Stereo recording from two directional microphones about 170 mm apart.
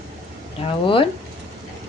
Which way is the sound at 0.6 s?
30° left (ahead or behind).